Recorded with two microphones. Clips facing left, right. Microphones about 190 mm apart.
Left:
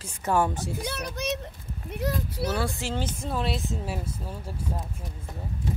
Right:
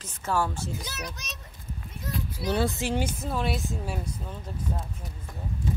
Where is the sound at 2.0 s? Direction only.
70° left (ahead or behind).